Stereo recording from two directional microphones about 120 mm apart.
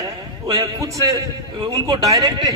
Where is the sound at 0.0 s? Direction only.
30° right (ahead or behind).